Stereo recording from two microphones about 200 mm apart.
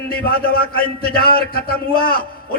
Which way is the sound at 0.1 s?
50° left (ahead or behind).